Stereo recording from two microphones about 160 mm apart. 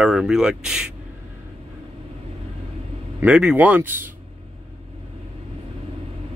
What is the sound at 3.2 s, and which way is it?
Speech, 10° right (ahead or behind).